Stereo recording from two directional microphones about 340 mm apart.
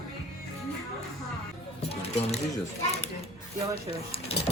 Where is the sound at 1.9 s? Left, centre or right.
Centre.